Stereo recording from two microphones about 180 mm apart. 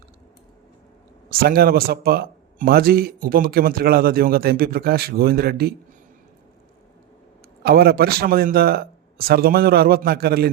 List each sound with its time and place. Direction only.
1.3 s a man's voice: 55° right (ahead or behind)
7.6 s a man's voice: 60° right (ahead or behind)